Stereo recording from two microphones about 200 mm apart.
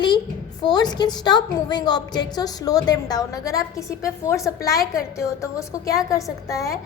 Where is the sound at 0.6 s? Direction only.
20° left (ahead or behind).